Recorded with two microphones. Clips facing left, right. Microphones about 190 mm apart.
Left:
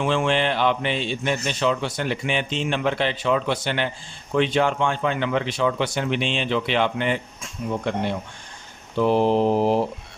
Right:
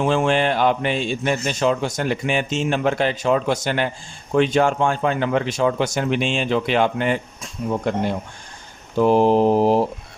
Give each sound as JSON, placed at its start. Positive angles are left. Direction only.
{"t": 0.0, "sound": "a man's voice", "side_deg": -40}